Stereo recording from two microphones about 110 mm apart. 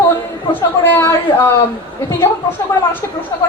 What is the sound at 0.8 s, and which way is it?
Speech, 20° left (ahead or behind).